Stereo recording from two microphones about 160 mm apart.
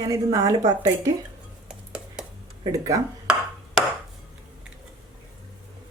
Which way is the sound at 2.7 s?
20° right (ahead or behind).